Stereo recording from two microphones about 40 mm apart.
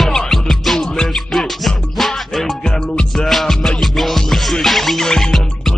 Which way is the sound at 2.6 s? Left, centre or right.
Centre.